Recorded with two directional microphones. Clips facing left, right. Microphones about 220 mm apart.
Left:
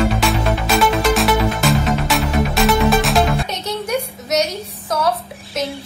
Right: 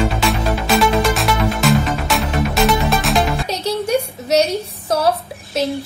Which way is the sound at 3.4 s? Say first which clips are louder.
Right 4 dB; 30° right (ahead or behind).